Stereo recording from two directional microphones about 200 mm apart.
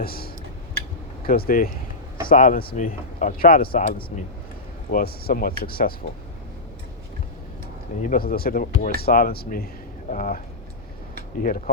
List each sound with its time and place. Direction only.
0.0 s tick-tock: 50° left (ahead or behind)
1.2 s speech: 45° left (ahead or behind)
8.0 s speech: 45° left (ahead or behind)
11.4 s speech: 45° left (ahead or behind)